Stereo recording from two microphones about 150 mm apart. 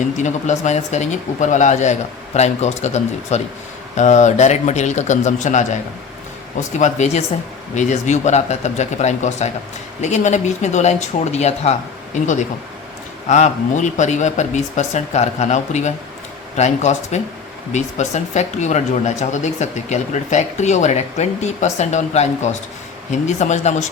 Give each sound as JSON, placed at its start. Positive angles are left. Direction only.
{"t": 0.0, "sound": "speech", "side_deg": 50}